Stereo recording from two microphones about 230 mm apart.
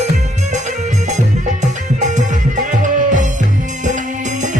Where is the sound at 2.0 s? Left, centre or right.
Right.